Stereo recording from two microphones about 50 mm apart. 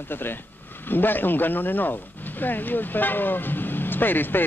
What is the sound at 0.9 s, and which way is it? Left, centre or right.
Speech, left.